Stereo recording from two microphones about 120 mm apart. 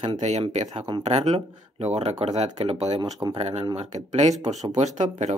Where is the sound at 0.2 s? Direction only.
70° right (ahead or behind).